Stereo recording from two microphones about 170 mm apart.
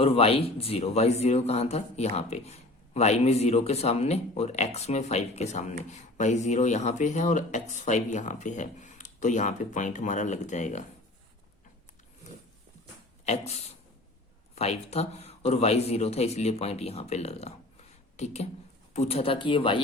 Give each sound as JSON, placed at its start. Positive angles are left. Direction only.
{"t": 0.0, "sound": "speech", "side_deg": 35}
{"t": 14.5, "sound": "speech", "side_deg": 40}
{"t": 18.9, "sound": "speech", "side_deg": 35}